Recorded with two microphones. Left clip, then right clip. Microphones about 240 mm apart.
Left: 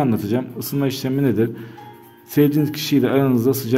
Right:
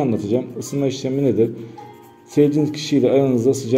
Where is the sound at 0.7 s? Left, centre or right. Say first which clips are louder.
Right 1 dB; left.